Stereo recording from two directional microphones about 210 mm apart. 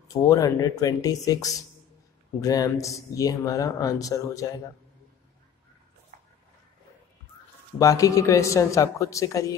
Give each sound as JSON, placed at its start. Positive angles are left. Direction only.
{"t": 0.1, "sound": "speech", "side_deg": 15}
{"t": 7.8, "sound": "speech", "side_deg": 15}